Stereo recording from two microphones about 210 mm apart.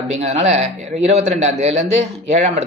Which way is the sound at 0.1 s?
30° right (ahead or behind).